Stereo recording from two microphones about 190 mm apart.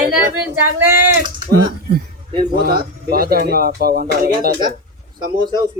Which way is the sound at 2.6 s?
55° right (ahead or behind).